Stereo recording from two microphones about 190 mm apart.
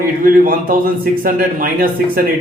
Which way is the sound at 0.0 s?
50° right (ahead or behind).